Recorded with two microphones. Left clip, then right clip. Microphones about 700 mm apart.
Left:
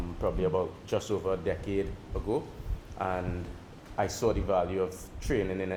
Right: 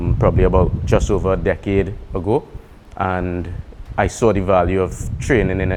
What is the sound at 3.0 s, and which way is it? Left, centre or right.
Speech, right.